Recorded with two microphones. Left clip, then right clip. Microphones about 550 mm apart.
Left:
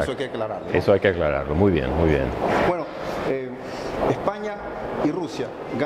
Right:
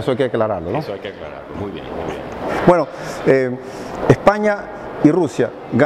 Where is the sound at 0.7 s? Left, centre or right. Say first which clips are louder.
Left 7 dB; left.